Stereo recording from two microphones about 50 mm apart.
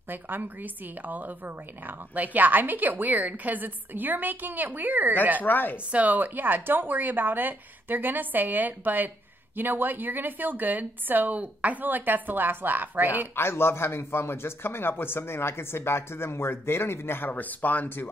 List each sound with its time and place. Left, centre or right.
0.1 s a woman's voice: right
5.4 s speech: left
5.9 s a woman's voice: right
13.4 s a man's voice: left
17.3 s speech: left